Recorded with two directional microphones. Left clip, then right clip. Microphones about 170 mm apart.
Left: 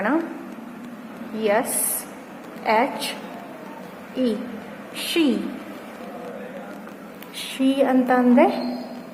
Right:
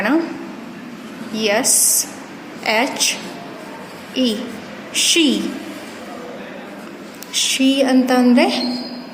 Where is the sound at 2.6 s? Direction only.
15° right (ahead or behind).